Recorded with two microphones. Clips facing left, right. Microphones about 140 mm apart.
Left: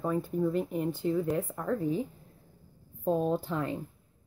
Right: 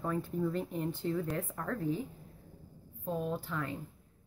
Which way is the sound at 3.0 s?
30° left (ahead or behind).